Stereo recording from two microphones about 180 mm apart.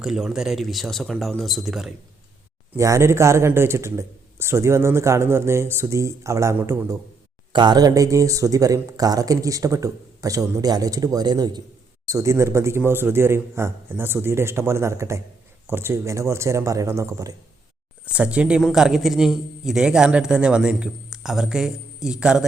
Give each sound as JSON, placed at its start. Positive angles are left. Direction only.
{"t": 0.0, "sound": "a man's voice", "side_deg": -5}
{"t": 2.7, "sound": "a man's voice", "side_deg": -15}
{"t": 18.0, "sound": "a man's voice", "side_deg": -5}